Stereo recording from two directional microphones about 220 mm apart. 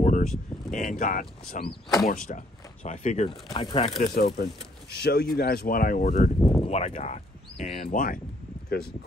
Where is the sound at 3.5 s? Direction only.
20° left (ahead or behind).